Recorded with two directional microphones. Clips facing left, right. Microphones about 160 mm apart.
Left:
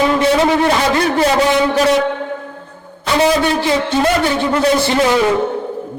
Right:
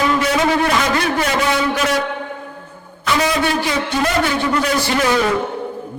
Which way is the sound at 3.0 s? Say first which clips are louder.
Left 4 dB; 30° left (ahead or behind).